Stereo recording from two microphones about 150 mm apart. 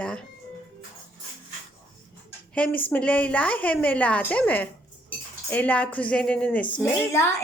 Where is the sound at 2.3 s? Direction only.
10° left (ahead or behind).